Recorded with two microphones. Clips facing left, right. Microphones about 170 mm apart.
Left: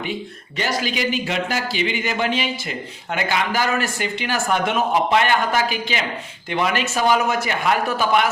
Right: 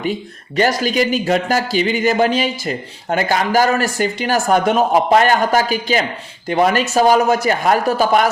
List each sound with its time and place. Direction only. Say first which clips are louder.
0.5 s speech: right 8 dB; 45° right (ahead or behind)